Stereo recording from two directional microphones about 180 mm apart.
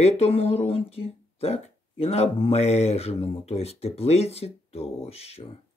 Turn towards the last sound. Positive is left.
turn(degrees=35)  # may be behind; listen again after turning